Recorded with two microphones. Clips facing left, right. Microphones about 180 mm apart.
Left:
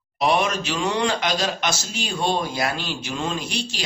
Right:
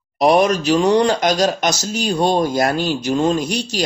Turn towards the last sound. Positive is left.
turn(degrees=-45)  # may be behind; listen again after turning